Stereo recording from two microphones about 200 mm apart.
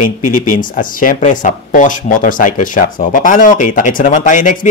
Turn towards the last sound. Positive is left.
turn(degrees=40)  # may be behind; listen again after turning